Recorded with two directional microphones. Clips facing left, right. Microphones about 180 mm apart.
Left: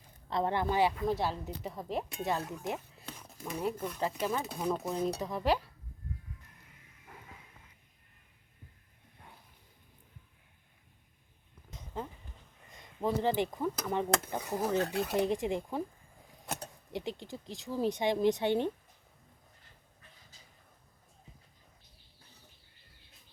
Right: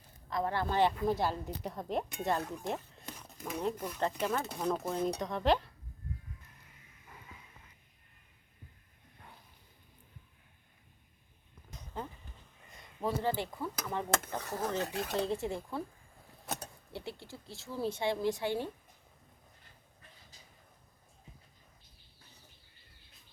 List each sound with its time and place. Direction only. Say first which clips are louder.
0.3 s a woman's voice: left 2 dB; 25° left (ahead or behind); by 5.6 s 5° left (ahead or behind)
13.0 s speech: left 3 dB; 20° left (ahead or behind)